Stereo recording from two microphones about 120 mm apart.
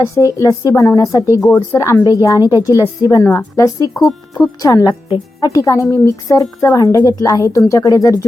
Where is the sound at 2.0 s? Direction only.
30° left (ahead or behind).